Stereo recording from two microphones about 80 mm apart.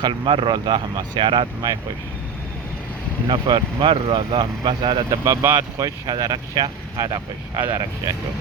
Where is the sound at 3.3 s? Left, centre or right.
Right.